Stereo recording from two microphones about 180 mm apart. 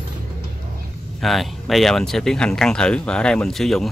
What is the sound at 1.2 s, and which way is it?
Speech, centre (ahead or behind).